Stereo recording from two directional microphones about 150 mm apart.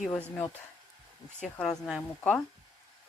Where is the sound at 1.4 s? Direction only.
5° left (ahead or behind).